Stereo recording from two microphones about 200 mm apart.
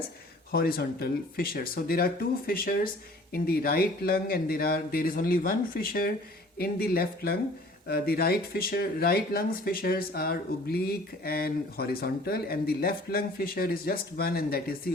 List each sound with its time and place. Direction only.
0.5 s speech: 50° left (ahead or behind)